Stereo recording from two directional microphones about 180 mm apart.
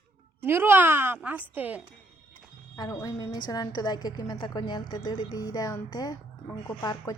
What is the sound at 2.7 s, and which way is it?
A woman's voice, 20° left (ahead or behind).